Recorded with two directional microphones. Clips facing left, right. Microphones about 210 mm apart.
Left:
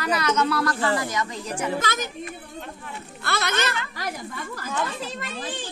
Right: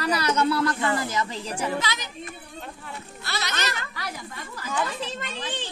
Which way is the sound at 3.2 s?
55° left (ahead or behind).